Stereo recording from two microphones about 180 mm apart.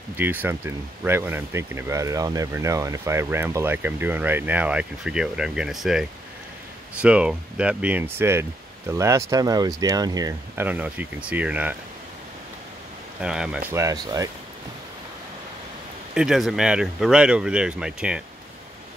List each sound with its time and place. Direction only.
0.2 s speech: 10° right (ahead or behind)
10.7 s speech: 10° right (ahead or behind)
13.2 s speech: 5° right (ahead or behind)
16.2 s speech: centre (ahead or behind)